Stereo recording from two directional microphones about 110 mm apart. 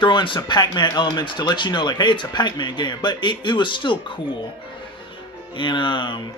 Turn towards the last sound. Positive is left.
turn(degrees=50)  # may be behind; listen again after turning